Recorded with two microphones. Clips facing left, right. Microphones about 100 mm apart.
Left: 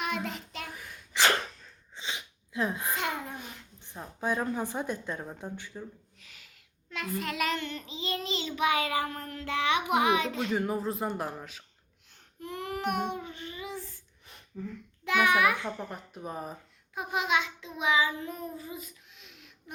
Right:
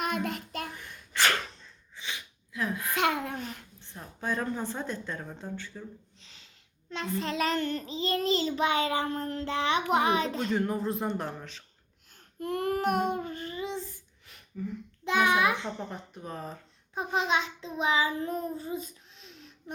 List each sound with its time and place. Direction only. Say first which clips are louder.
0.0 s child singing: right 2 dB; 50° right (ahead or behind)
0.7 s sneeze: even; 5° left (ahead or behind)
2.0 s sneeze: left 2 dB; 20° left (ahead or behind)
2.9 s a sound: right 5 dB; 70° right (ahead or behind)
3.8 s a sound: left 3 dB; 15° left (ahead or behind)
4.2 s speech: left 1 dB; 10° left (ahead or behind)
6.1 s a sound: left 1 dB; 25° right (ahead or behind)
6.9 s child singing: right 2 dB; 30° right (ahead or behind)
10.5 s speech: right 1 dB; 5° left (ahead or behind)
12.4 s babbling: right 6 dB; 50° right (ahead or behind); by 14.0 s 20° right (ahead or behind)
14.7 s a child's voice: even; 20° right (ahead or behind)
15.9 s speech: left 1 dB; 5° left (ahead or behind)
17.2 s child singing: right 1 dB; 30° right (ahead or behind)